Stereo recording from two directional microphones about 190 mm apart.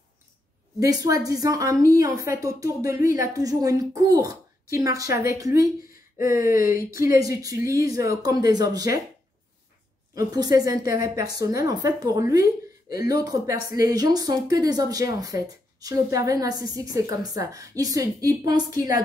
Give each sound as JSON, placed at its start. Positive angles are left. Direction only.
{"t": 0.7, "sound": "speech", "side_deg": -20}
{"t": 6.4, "sound": "speech", "side_deg": 45}
{"t": 7.0, "sound": "speech", "side_deg": -15}
{"t": 10.1, "sound": "speech", "side_deg": -20}